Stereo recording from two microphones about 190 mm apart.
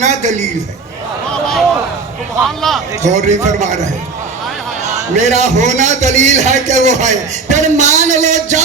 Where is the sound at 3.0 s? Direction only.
40° right (ahead or behind).